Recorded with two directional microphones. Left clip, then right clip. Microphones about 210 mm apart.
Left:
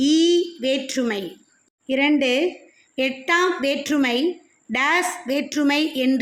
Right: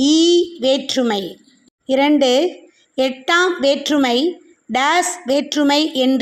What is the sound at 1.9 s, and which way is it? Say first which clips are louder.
A woman's voice: right 5 dB; 15° right (ahead or behind).